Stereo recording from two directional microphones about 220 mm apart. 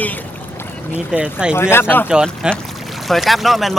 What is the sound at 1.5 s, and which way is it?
Speech, 10° left (ahead or behind).